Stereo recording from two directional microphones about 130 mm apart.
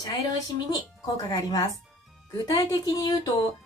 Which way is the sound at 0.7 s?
30° left (ahead or behind).